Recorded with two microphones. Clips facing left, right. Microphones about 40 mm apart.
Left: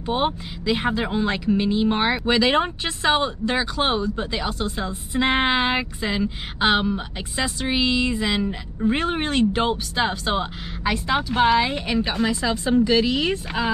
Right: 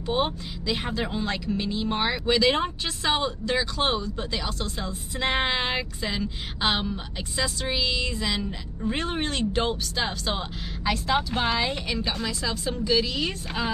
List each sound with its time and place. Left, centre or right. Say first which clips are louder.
0.1 s speech: left 3 dB; centre